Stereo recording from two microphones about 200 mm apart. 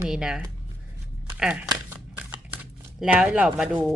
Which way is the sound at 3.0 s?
5° right (ahead or behind).